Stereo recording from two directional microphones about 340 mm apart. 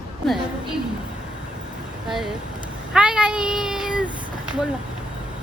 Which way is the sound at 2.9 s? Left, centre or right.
Centre.